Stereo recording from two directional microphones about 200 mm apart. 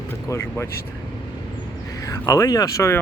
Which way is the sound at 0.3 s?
10° left (ahead or behind).